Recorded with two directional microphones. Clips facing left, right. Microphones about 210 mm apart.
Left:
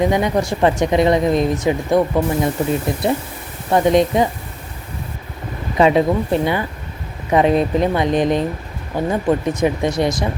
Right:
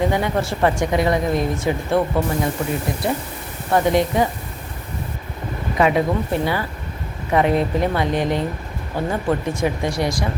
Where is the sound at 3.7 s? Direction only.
20° left (ahead or behind).